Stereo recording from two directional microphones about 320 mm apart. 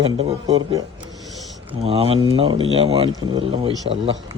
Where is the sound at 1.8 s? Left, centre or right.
Centre.